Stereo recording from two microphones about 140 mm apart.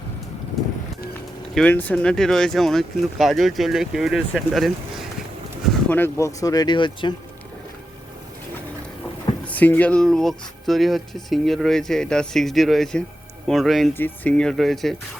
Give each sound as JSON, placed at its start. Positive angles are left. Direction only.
{"t": 1.5, "sound": "speech", "side_deg": 10}
{"t": 5.9, "sound": "speech", "side_deg": 15}
{"t": 9.5, "sound": "speech", "side_deg": 10}
{"t": 13.9, "sound": "speech", "side_deg": 10}